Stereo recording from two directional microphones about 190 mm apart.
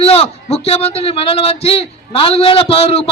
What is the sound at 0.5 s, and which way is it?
A man's voice, 30° left (ahead or behind).